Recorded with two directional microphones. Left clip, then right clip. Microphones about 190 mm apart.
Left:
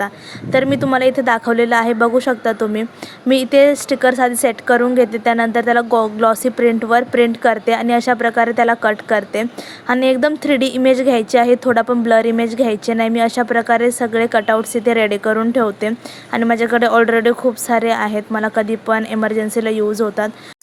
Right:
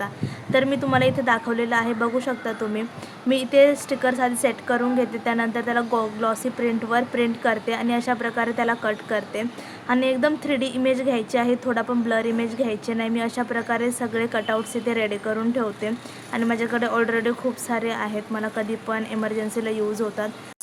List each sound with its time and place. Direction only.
0.5 s a woman's voice: 40° left (ahead or behind)